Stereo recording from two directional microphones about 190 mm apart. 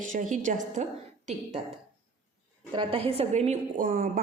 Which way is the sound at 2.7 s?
30° right (ahead or behind).